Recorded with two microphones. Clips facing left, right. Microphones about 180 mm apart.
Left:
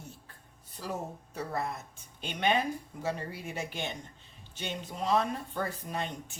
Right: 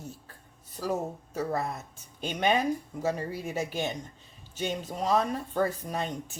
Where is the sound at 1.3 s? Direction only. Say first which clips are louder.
Right 4 dB; 40° right (ahead or behind).